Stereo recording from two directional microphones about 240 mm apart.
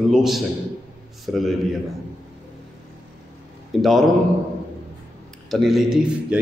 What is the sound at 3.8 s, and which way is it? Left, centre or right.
Speech, centre.